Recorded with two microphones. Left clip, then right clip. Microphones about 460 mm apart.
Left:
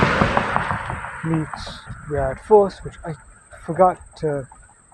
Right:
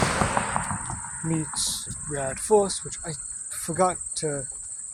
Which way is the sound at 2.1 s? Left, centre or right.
Right.